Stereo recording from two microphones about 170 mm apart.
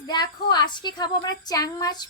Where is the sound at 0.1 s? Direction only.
25° left (ahead or behind).